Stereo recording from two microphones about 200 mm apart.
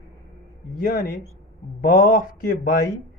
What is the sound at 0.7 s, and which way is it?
A woman's voice, 45° left (ahead or behind).